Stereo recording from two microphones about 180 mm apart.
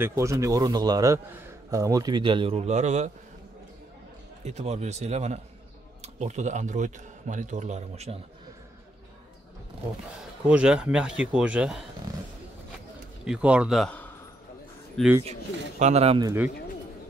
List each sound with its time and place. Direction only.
0.0 s a man's voice: 15° right (ahead or behind); by 3.1 s 40° right (ahead or behind)
4.5 s speech: 40° right (ahead or behind)
10.4 s a man's voice: 5° right (ahead or behind)
13.2 s a man's voice: 5° right (ahead or behind)
15.8 s speech: 35° right (ahead or behind)